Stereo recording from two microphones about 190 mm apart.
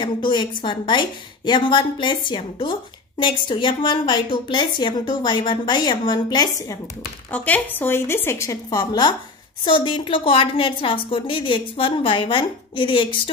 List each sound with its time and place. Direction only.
0.0 s a woman's voice: 25° left (ahead or behind)
7.2 s a woman's voice: 10° left (ahead or behind); by 13.2 s 25° left (ahead or behind)